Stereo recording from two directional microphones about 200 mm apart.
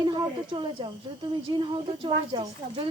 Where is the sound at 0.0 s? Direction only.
25° right (ahead or behind).